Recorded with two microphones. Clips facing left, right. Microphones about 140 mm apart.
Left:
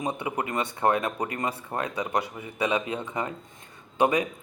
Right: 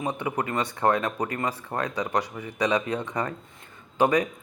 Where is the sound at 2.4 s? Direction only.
25° left (ahead or behind).